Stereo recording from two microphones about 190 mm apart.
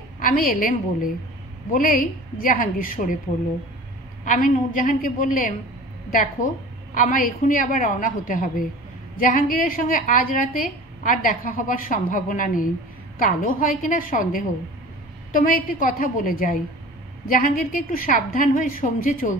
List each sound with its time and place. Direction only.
0.2 s a woman's voice: 45° left (ahead or behind)
4.2 s a woman's voice: 45° left (ahead or behind)
6.9 s a woman's voice: 45° left (ahead or behind)